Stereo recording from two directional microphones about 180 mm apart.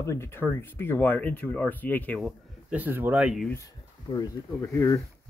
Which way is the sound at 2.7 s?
10° right (ahead or behind).